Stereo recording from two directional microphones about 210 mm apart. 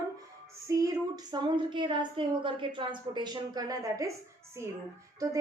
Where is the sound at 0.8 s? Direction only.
20° right (ahead or behind).